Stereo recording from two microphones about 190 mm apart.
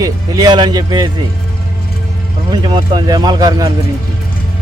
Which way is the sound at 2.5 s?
25° right (ahead or behind).